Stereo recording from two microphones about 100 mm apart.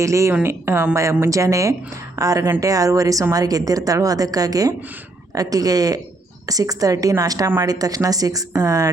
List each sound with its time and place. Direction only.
0.0 s a woman's voice: 30° right (ahead or behind)